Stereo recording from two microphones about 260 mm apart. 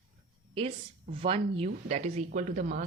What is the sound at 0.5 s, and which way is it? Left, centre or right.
A woman's voice, right.